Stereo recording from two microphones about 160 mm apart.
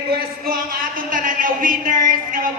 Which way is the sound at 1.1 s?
55° right (ahead or behind).